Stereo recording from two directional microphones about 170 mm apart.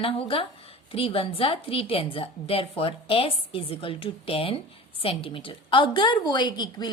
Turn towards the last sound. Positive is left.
turn(degrees=25)  # may be behind; listen again after turning